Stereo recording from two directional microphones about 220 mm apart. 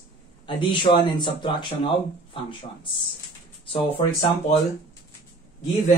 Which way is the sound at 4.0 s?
25° left (ahead or behind).